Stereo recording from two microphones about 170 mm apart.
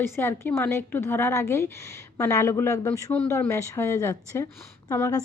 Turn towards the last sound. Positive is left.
turn(degrees=20)  # may be behind; listen again after turning